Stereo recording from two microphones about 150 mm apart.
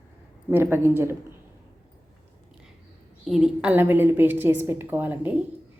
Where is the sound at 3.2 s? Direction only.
5° right (ahead or behind).